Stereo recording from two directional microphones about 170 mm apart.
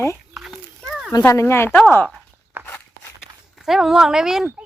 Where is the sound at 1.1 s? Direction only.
20° left (ahead or behind).